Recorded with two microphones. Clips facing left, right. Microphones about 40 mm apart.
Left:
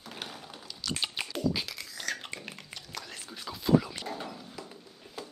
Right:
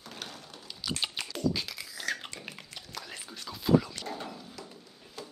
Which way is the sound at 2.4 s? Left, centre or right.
Centre.